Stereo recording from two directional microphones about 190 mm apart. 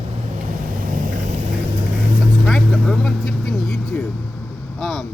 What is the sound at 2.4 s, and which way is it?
Vehicle, centre (ahead or behind).